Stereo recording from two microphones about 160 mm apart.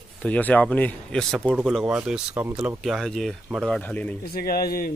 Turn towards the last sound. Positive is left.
turn(degrees=70)  # may be behind; listen again after turning